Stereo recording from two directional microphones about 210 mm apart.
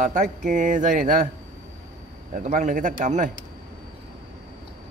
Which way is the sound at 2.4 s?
40° right (ahead or behind).